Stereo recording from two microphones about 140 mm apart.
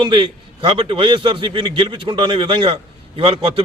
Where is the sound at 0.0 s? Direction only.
35° right (ahead or behind).